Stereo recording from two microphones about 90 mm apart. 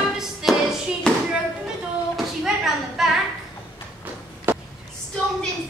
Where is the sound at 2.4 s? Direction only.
5° right (ahead or behind).